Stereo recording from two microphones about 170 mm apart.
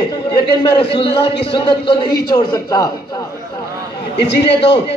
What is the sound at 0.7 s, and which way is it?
A man's voice, 30° left (ahead or behind).